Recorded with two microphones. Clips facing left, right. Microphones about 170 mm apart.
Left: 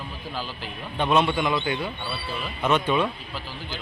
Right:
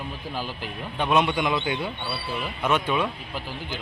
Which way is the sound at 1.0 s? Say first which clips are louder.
Left 1 dB; 10° right (ahead or behind).